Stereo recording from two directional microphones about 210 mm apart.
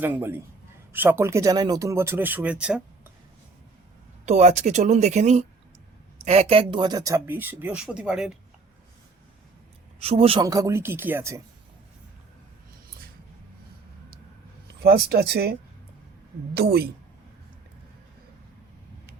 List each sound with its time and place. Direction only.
0.0 s speech: 10° right (ahead or behind)
4.3 s speech: 35° right (ahead or behind); by 8.3 s 5° right (ahead or behind)
10.0 s a man's voice: 30° right (ahead or behind)
10.4 s speech: 15° right (ahead or behind)
14.8 s speech: 50° right (ahead or behind)
16.6 s speech: 45° right (ahead or behind)